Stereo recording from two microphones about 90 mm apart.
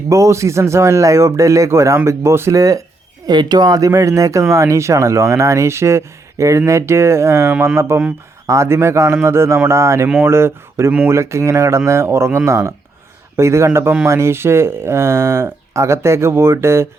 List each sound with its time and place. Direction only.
0.1 s speech: 35° right (ahead or behind)
3.2 s speech: 50° right (ahead or behind); by 16.9 s 30° right (ahead or behind)